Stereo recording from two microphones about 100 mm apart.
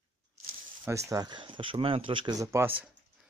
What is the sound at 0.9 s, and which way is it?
Speech, 35° right (ahead or behind).